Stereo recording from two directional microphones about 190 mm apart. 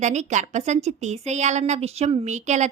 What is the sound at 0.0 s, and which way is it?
A woman's voice, 40° right (ahead or behind).